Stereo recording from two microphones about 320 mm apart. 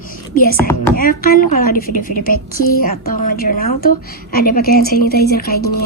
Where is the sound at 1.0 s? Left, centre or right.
Left.